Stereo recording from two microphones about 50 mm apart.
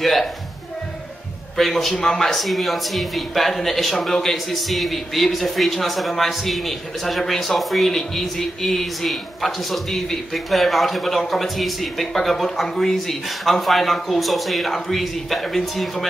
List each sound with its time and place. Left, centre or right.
0.0 s speech: centre
1.6 s speech: centre